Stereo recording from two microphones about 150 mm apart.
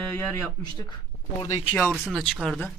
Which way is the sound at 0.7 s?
30° left (ahead or behind).